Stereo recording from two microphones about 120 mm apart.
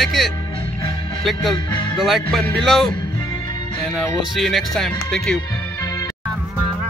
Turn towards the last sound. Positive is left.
turn(degrees=5)  # may be behind; listen again after turning